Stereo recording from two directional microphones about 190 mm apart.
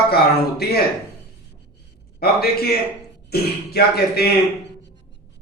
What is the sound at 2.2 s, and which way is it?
A man's voice, 55° left (ahead or behind).